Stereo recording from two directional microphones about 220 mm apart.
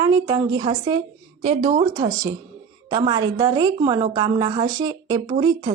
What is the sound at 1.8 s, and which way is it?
A woman's voice, 15° right (ahead or behind).